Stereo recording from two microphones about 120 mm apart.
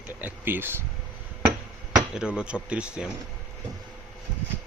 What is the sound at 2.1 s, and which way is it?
Speech, 10° right (ahead or behind).